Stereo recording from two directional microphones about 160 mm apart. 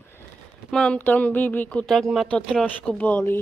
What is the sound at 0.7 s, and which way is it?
Speech, 5° left (ahead or behind).